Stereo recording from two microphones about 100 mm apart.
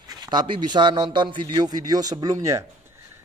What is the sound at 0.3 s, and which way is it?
A man's voice, 45° right (ahead or behind).